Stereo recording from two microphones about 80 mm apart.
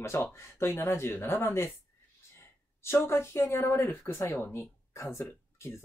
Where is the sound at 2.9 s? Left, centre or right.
Left.